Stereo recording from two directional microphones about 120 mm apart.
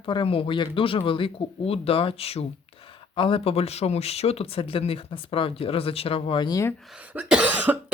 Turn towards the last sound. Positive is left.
turn(degrees=-15)  # may be behind; listen again after turning